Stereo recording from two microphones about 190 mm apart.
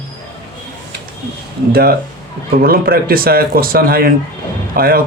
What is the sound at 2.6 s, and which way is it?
Speech, 50° right (ahead or behind).